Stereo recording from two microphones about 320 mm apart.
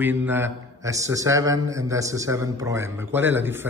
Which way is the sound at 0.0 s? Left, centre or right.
Centre.